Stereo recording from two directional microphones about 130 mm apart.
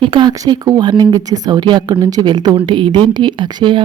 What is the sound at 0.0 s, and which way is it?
Speech, 40° right (ahead or behind).